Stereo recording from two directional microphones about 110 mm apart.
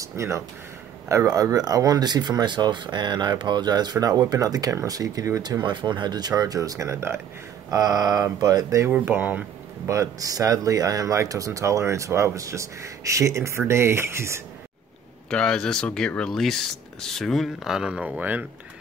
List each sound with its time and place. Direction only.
0.0 s speech: 25° right (ahead or behind)
7.7 s speech: 35° right (ahead or behind)
8.9 s speech: 15° right (ahead or behind)
9.8 s speech: 30° right (ahead or behind)
15.2 s speech: 5° left (ahead or behind); by 18.4 s 15° right (ahead or behind)